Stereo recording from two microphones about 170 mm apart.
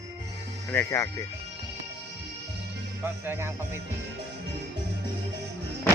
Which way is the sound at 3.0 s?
15° right (ahead or behind).